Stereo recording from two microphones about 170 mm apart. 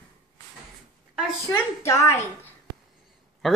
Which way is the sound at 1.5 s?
15° left (ahead or behind).